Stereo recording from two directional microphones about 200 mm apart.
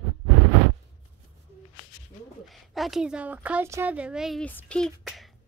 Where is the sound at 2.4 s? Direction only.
Centre (ahead or behind).